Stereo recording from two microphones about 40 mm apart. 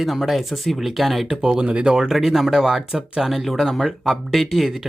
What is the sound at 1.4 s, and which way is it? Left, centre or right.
Speech, right.